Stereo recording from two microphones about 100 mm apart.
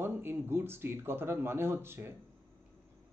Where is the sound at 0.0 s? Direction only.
20° right (ahead or behind).